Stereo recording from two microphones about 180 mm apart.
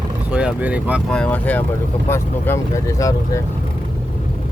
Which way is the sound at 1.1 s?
5° left (ahead or behind).